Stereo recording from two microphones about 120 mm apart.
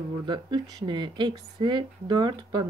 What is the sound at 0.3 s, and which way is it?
A woman's voice, 40° right (ahead or behind).